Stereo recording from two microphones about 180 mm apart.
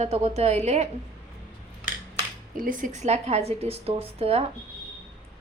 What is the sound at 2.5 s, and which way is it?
A woman's voice, 50° right (ahead or behind).